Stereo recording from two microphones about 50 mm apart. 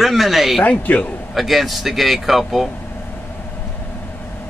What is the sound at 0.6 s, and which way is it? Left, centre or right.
Speech, left.